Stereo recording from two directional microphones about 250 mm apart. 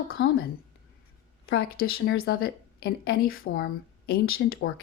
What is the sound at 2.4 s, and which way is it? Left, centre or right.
Speech, left.